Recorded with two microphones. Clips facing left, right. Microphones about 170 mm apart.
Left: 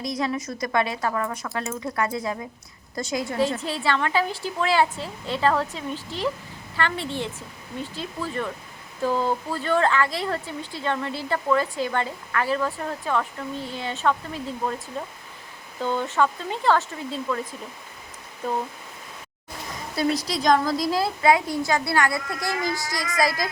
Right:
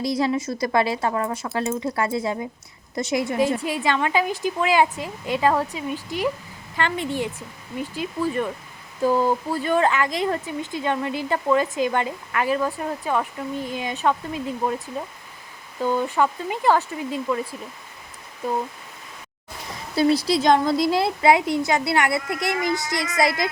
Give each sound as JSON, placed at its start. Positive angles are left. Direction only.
{"t": 0.0, "sound": "a woman's voice", "side_deg": -30}
{"t": 15.8, "sound": "speech", "side_deg": -10}
{"t": 20.0, "sound": "a woman's voice", "side_deg": -30}